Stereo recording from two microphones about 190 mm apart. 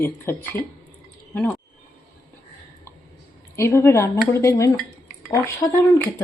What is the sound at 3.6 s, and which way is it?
A man's voice, 15° left (ahead or behind).